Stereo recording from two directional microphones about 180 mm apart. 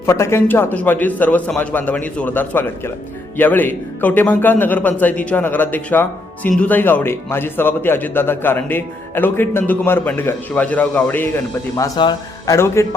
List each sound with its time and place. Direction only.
0.0 s a man's voice: 15° left (ahead or behind)
11.8 s a man's voice: 20° left (ahead or behind)